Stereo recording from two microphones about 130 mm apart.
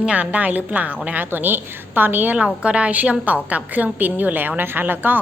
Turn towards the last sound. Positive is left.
turn(degrees=-15)  # may be behind; listen again after turning